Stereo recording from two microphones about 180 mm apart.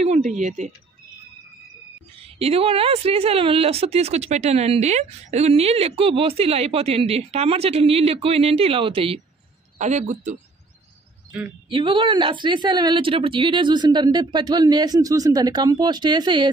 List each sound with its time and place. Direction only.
0.0 s a woman's voice: 40° right (ahead or behind)
2.2 s a woman's voice: 35° right (ahead or behind)
11.3 s a woman's voice: 5° right (ahead or behind)
11.7 s speech: 30° right (ahead or behind)